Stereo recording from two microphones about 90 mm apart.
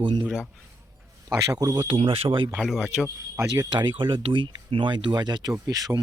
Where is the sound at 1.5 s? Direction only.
45° right (ahead or behind).